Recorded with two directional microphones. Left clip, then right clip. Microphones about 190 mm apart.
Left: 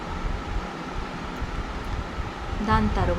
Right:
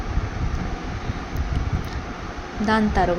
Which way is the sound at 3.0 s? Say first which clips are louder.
Right 6 dB; 20° right (ahead or behind).